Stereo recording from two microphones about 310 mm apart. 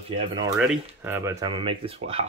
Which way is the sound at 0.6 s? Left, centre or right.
Centre.